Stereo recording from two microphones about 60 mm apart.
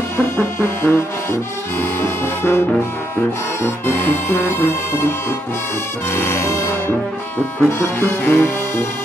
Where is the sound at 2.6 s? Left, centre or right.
Left.